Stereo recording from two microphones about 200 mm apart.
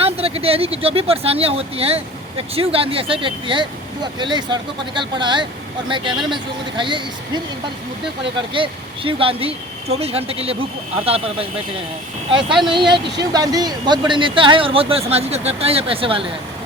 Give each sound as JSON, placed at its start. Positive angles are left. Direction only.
{"t": 0.0, "sound": "speech", "side_deg": -30}
{"t": 8.5, "sound": "speech", "side_deg": -25}